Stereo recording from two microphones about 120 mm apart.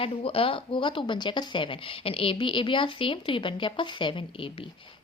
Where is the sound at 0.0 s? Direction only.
55° left (ahead or behind).